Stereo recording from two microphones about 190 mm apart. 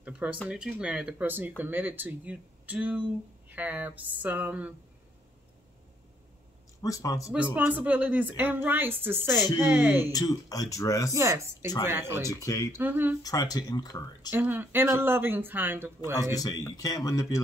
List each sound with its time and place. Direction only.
0.0 s a sound: 5° right (ahead or behind)
0.5 s speech: 5° right (ahead or behind)
6.8 s speech: 15° left (ahead or behind)
7.5 s speech: 10° right (ahead or behind)
10.1 s speech: 20° left (ahead or behind)
11.1 s speech: 15° right (ahead or behind)
12.3 s speech: 15° left (ahead or behind)
12.7 s speech: 10° right (ahead or behind)
13.2 s speech: 20° left (ahead or behind)
14.3 s speech: 10° right (ahead or behind)
16.3 s speech: 20° left (ahead or behind)